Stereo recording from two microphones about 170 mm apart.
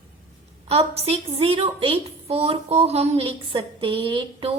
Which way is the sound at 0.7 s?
35° right (ahead or behind).